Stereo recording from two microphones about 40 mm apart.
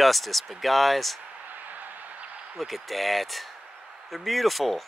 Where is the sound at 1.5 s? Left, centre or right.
Right.